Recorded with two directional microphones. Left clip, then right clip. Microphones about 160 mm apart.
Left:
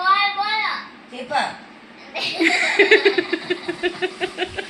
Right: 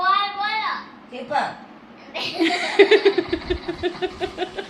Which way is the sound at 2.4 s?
15° right (ahead or behind).